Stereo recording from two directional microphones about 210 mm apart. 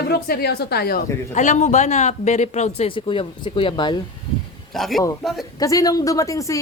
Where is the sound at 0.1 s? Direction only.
50° left (ahead or behind); by 4.0 s 20° left (ahead or behind).